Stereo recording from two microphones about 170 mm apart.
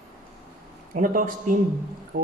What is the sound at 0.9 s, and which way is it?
Speech, 50° right (ahead or behind).